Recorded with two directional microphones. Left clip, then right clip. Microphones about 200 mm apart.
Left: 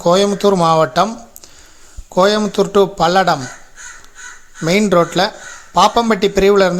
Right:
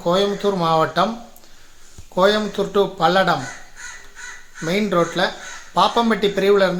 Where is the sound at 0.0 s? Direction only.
45° left (ahead or behind).